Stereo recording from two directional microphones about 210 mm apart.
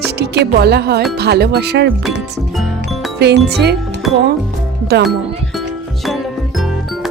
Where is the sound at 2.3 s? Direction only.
Centre (ahead or behind).